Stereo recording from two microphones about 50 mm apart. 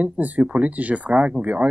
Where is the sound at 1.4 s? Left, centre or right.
Centre.